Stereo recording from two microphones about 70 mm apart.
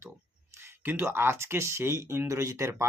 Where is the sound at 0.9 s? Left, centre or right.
Right.